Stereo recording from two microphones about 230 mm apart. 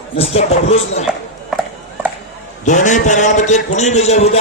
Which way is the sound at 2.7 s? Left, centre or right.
Left.